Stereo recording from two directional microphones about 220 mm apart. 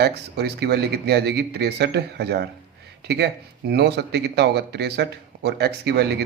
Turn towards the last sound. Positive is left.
turn(degrees=-50)  # may be behind; listen again after turning